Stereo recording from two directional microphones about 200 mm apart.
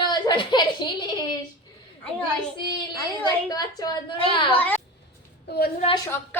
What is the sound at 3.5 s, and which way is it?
Speech, 20° left (ahead or behind).